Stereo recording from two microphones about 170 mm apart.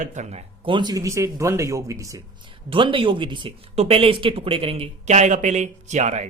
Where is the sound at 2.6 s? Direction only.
30° right (ahead or behind).